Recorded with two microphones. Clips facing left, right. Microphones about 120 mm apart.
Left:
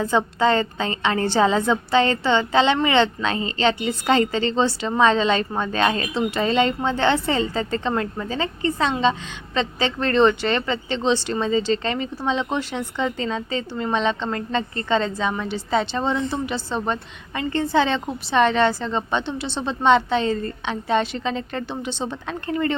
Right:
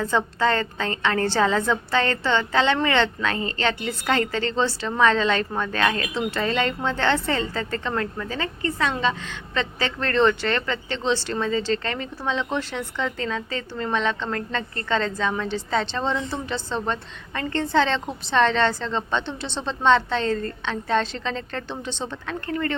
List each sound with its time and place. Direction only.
0.0 s a woman's voice: 15° left (ahead or behind)